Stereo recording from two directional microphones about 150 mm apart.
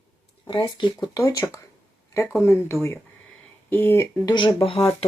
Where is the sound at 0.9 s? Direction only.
20° left (ahead or behind).